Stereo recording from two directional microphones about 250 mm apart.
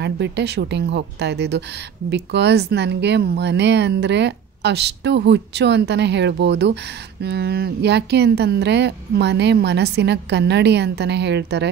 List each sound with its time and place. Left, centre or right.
0.0 s a woman's voice: right